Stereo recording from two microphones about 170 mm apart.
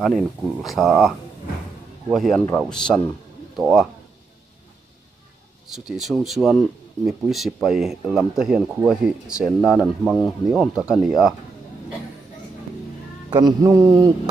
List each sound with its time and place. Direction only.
0.0 s speech: centre (ahead or behind)
5.7 s speech: centre (ahead or behind)
13.3 s a sound: 25° right (ahead or behind)